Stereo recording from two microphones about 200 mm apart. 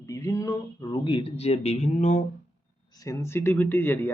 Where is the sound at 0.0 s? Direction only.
15° left (ahead or behind); by 2.2 s 35° left (ahead or behind).